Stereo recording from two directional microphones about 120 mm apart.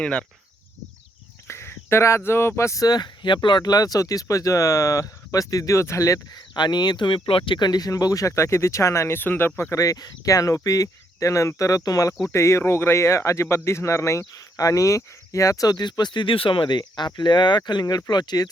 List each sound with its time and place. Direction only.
0.0 s speech: 10° left (ahead or behind)
1.5 s speech: 20° left (ahead or behind)
6.5 s speech: 40° left (ahead or behind)